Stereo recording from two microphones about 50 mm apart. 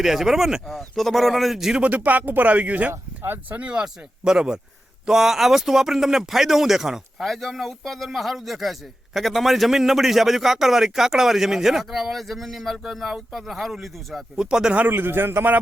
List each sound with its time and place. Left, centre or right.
0.0 s speech: centre
0.8 s a man's voice: centre
1.8 s a man's voice: right; by 14.3 s centre
14.3 s speech: centre
14.8 s a man's voice: right